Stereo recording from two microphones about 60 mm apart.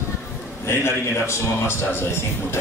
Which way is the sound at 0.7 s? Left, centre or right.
Left.